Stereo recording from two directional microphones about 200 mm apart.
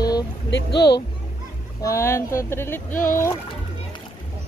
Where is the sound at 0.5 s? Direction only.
60° left (ahead or behind).